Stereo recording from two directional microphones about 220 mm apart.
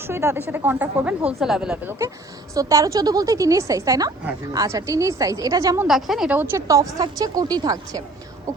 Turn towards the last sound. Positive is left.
turn(degrees=-15)  # may be behind; listen again after turning